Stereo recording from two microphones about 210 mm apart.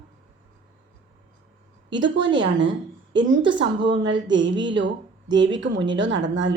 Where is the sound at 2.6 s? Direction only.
60° right (ahead or behind).